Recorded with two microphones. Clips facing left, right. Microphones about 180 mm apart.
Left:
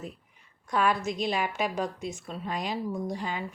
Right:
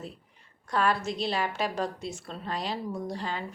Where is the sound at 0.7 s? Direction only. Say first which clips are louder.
Left 1 dB; 10° left (ahead or behind).